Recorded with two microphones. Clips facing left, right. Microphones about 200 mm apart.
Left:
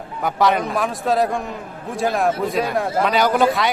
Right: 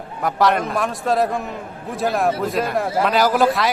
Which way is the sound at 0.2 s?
Centre (ahead or behind).